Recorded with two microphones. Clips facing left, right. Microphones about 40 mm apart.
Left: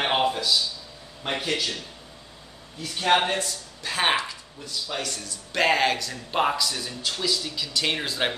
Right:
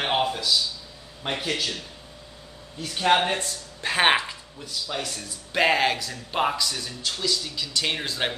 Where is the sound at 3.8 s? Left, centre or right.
Right.